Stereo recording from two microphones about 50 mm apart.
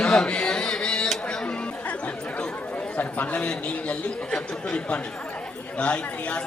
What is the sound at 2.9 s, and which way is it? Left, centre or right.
Speech, left.